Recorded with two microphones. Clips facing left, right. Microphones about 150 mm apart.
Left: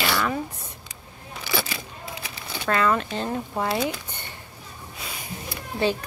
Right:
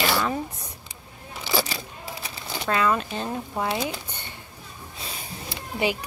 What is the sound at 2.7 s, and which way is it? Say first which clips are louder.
Speech: left 1 dB; 15° right (ahead or behind).